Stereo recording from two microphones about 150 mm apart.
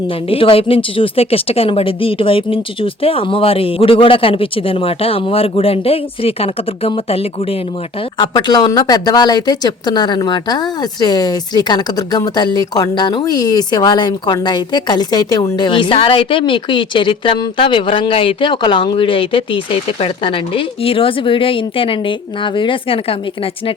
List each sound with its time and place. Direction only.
0.3 s speech: 40° left (ahead or behind)
8.2 s speech: 30° left (ahead or behind)